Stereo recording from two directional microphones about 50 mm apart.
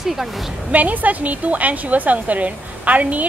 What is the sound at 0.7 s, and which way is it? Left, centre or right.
A woman's voice, right.